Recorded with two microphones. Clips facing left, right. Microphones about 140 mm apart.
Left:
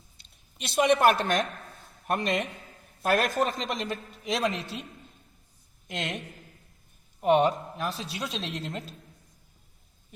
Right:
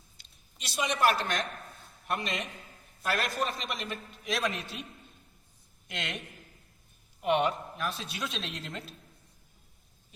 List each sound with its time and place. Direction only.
0.6 s a man's voice: 55° left (ahead or behind); by 3.9 s 40° left (ahead or behind)
3.9 s speech: 20° left (ahead or behind)
5.9 s speech: 35° left (ahead or behind)
7.2 s speech: 40° left (ahead or behind)
7.8 s speech: 30° left (ahead or behind)